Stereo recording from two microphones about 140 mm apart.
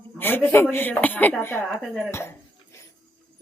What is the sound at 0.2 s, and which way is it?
A man's voice, 15° left (ahead or behind).